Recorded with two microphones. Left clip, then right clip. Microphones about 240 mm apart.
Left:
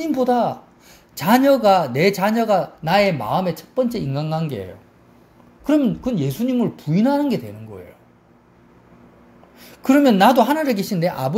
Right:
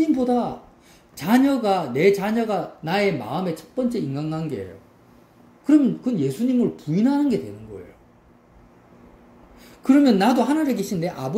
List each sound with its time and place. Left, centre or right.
0.0 s a man's voice: left
5.7 s a man's voice: left
9.6 s a sound: left
10.4 s a man's voice: left